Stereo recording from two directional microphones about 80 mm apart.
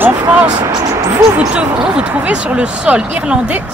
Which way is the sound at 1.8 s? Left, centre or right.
Centre.